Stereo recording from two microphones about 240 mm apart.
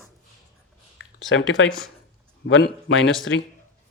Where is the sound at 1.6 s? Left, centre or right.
Centre.